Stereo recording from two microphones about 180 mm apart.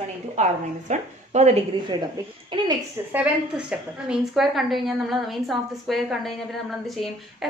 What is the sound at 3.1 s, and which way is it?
A woman's voice, 5° right (ahead or behind).